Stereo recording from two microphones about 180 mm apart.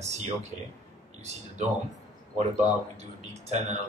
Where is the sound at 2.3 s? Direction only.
40° right (ahead or behind).